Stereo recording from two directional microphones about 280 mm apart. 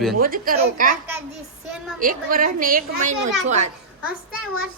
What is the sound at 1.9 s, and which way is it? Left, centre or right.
A woman's voice, right.